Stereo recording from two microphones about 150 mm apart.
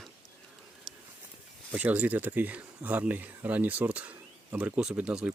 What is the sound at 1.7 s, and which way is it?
Speech, 10° right (ahead or behind).